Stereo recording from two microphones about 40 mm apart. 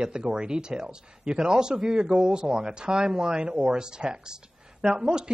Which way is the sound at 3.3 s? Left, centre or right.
Right.